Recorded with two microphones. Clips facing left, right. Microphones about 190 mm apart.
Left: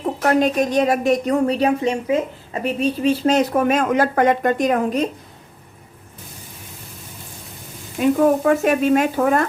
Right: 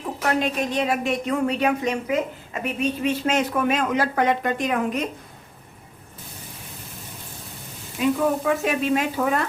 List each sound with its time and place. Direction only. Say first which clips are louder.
0.0 s a woman's voice: left 6 dB; 45° left (ahead or behind)
7.9 s speech: left 6 dB; 50° left (ahead or behind)